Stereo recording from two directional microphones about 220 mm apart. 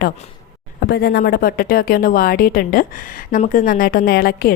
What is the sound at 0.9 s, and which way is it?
A woman's voice, 45° left (ahead or behind).